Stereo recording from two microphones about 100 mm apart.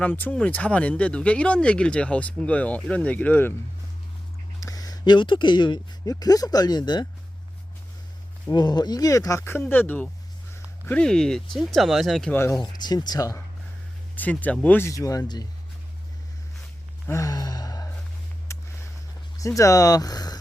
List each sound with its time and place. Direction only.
0.0 s speech: 15° left (ahead or behind)
4.6 s speech: 35° left (ahead or behind)
8.4 s speech: 45° left (ahead or behind); by 10.1 s 15° left (ahead or behind)
11.0 s speech: 5° left (ahead or behind)
12.3 s speech: 25° left (ahead or behind)
12.5 s speech: 45° left (ahead or behind)
14.2 s speech: 15° left (ahead or behind)
14.8 s speech: 35° left (ahead or behind)
17.1 s gasp: 35° left (ahead or behind)
18.5 s a sound: 30° left (ahead or behind)
19.4 s speech: 35° left (ahead or behind)